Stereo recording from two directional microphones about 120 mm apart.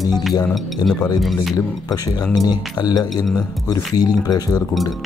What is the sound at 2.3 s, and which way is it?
Speech, 35° left (ahead or behind).